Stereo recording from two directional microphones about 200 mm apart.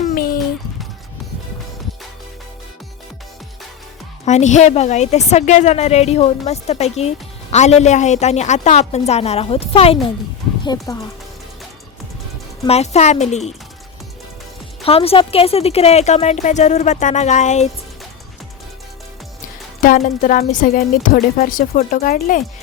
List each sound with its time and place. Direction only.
0.0 s a sound: 45° left (ahead or behind)
4.3 s a woman's voice: 35° left (ahead or behind)
10.6 s speech: 20° left (ahead or behind)
12.6 s a woman's voice: 30° left (ahead or behind)
14.8 s a woman's voice: 30° left (ahead or behind)
19.8 s a woman's voice: 40° left (ahead or behind)